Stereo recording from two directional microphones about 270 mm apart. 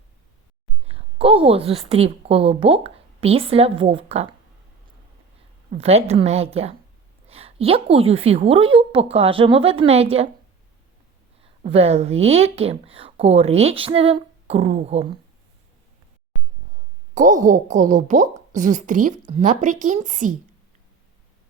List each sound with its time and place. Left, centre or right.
0.9 s a woman's voice: right
5.7 s speech: right
11.6 s speech: right
17.2 s speech: right